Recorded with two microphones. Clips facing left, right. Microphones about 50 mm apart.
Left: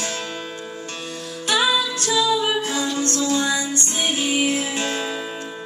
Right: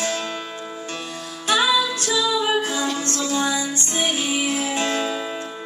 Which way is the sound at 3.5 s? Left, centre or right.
Left.